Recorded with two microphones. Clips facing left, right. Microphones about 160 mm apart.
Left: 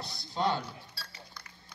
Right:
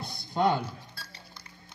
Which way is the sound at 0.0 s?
55° right (ahead or behind).